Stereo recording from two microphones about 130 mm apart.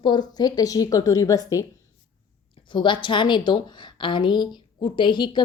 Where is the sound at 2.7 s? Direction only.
40° left (ahead or behind).